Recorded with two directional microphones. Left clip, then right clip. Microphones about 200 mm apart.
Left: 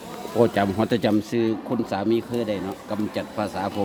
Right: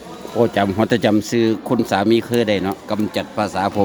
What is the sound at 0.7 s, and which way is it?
Speech, 15° right (ahead or behind).